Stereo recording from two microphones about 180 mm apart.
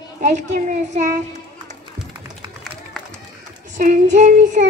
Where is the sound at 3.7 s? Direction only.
45° right (ahead or behind).